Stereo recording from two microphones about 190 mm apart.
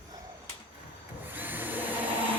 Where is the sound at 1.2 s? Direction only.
10° right (ahead or behind).